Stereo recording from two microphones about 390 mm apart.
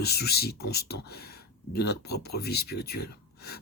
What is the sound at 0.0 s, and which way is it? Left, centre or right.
Speech, left.